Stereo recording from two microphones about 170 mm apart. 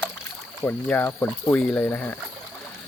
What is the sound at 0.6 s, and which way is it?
Speech, 10° left (ahead or behind).